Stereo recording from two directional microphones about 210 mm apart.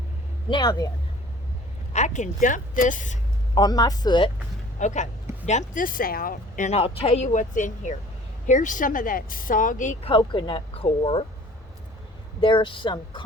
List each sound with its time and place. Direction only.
0.5 s speech: 20° left (ahead or behind)
1.9 s a woman's voice: 35° left (ahead or behind)
3.5 s speech: 20° left (ahead or behind)
4.8 s a woman's voice: 35° left (ahead or behind)
12.4 s speech: 25° left (ahead or behind)